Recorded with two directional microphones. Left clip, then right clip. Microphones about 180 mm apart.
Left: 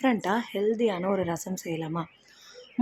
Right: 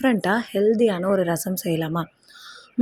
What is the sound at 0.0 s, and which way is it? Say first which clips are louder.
A woman's voice: right 5 dB; 25° right (ahead or behind).